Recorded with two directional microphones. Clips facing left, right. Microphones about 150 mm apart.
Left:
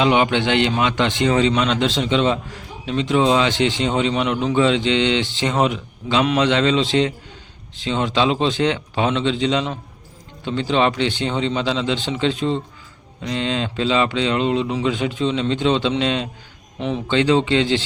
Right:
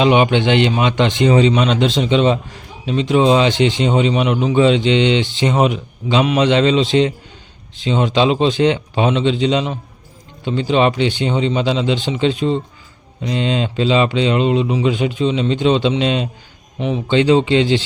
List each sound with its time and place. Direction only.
0.0 s a man's voice: 20° right (ahead or behind)